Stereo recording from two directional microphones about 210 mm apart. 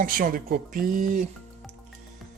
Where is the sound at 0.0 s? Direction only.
40° right (ahead or behind).